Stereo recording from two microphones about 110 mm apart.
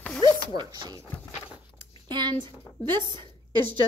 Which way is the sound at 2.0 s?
45° right (ahead or behind).